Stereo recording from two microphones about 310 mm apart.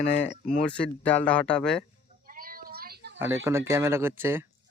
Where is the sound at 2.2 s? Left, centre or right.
Right.